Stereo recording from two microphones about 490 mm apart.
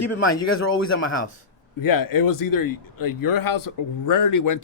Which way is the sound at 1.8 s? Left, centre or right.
Left.